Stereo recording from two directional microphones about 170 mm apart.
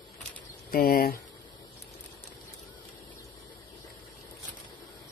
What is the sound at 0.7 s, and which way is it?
Speech, 60° left (ahead or behind).